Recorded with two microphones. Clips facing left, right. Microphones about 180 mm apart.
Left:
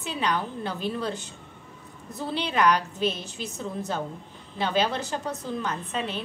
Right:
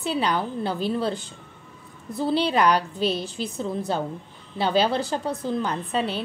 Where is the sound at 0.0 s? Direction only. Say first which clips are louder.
Right 4 dB; 35° right (ahead or behind).